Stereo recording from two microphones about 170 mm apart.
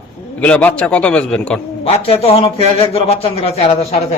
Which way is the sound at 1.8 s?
35° left (ahead or behind).